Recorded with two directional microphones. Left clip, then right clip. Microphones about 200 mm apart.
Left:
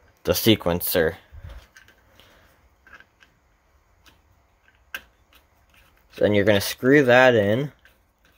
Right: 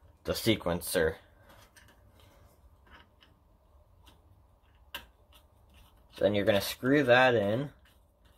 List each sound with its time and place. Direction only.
0.2 s speech: 50° left (ahead or behind)
6.2 s speech: 50° left (ahead or behind)